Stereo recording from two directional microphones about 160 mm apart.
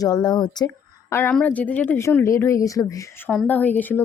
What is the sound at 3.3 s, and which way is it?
Speech, 10° left (ahead or behind).